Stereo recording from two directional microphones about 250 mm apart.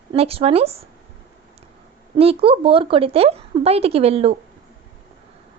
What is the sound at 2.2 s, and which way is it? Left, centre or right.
Speech, right.